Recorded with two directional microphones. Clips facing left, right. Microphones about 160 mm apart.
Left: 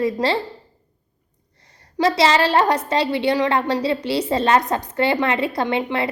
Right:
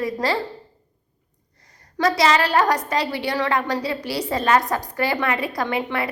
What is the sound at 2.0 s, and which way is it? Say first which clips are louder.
A woman's voice: left 2 dB; 25° left (ahead or behind).